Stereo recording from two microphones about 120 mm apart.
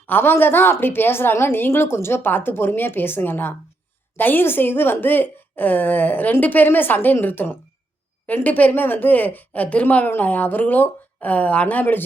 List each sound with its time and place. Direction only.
0.1 s speech: 20° left (ahead or behind)